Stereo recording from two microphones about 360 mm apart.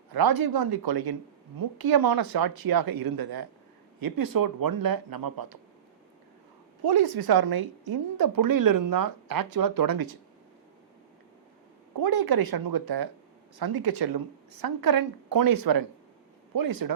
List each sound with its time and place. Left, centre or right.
0.1 s speech: right
1.5 s a woman's voice: right
6.8 s a woman's voice: right
11.9 s speech: right
14.6 s a woman's voice: right